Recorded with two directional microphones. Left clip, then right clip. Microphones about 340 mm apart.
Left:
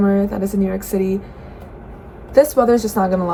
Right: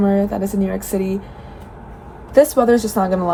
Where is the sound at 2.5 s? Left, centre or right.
Centre.